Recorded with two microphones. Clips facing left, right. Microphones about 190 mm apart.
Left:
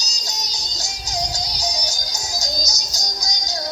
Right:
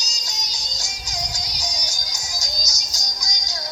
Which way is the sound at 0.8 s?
35° left (ahead or behind).